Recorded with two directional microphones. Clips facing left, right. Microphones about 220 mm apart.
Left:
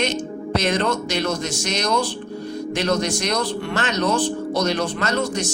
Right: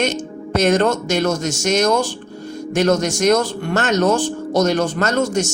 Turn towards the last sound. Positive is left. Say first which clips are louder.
# right 5 dB
turn(degrees=-45)  # may be behind; listen again after turning